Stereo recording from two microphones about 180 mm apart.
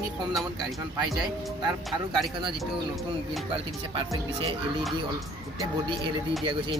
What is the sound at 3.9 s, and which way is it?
Speech, 30° right (ahead or behind).